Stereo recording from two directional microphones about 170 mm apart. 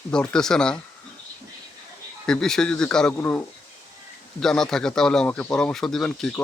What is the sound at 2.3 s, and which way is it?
Speech, 5° left (ahead or behind).